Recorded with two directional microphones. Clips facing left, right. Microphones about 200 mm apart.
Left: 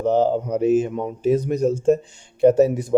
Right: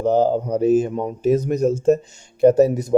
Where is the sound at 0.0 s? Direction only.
40° right (ahead or behind).